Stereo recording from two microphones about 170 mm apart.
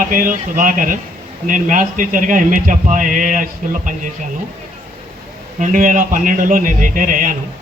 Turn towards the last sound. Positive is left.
turn(degrees=-50)  # may be behind; listen again after turning